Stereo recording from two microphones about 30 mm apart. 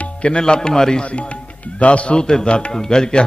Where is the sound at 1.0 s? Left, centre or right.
Left.